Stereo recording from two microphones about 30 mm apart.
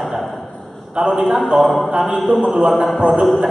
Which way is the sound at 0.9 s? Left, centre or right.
Right.